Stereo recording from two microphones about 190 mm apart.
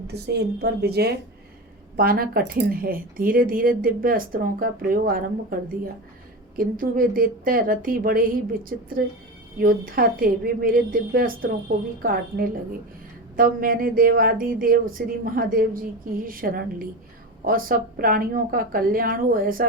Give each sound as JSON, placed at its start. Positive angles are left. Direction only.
{"t": 0.1, "sound": "a woman's voice", "side_deg": -60}
{"t": 9.6, "sound": "a woman's voice", "side_deg": -50}
{"t": 13.3, "sound": "a woman's voice", "side_deg": -50}